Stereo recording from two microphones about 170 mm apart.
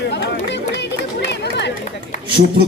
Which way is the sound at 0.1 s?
90° left.